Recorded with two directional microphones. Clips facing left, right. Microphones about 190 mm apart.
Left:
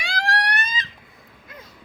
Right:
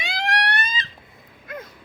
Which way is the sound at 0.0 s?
20° right (ahead or behind).